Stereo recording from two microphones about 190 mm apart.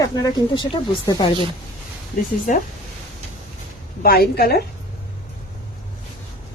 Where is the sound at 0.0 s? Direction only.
20° left (ahead or behind).